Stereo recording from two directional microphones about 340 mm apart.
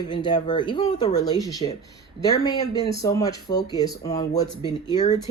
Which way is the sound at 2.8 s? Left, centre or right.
Centre.